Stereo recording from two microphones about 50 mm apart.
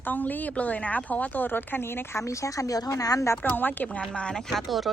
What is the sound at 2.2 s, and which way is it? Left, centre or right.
Speech, left.